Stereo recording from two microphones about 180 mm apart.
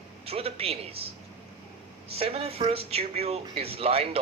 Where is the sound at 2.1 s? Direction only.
35° right (ahead or behind).